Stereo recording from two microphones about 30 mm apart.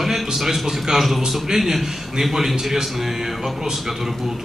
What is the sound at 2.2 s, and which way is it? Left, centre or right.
A man's voice, centre.